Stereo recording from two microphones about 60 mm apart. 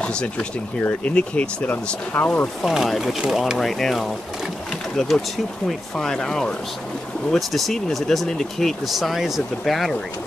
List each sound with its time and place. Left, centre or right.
0.0 s speech: centre
2.1 s speech: left
2.6 s speech: centre
3.5 s speech: centre
7.2 s speech: centre